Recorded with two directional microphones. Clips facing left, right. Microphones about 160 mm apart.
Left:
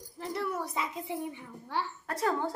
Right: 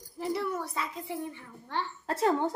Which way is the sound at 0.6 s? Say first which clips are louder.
Left 1 dB; 20° left (ahead or behind).